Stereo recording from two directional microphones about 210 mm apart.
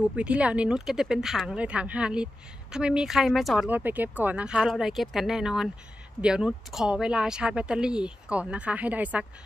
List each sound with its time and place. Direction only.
0.0 s speech: 5° right (ahead or behind)